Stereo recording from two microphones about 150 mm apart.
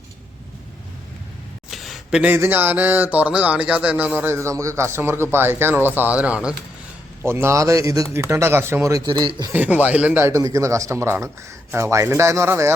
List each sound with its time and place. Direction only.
1.7 s a man's voice: centre (ahead or behind); by 9.0 s 20° right (ahead or behind)
9.0 s speech: 30° right (ahead or behind)
9.5 s speech: 10° right (ahead or behind)